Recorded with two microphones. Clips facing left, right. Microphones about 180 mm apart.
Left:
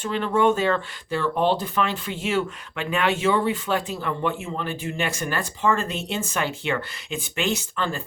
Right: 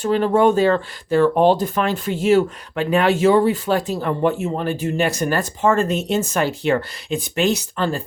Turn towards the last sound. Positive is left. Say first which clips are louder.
# right 5 dB
turn(degrees=-35)  # may be behind; listen again after turning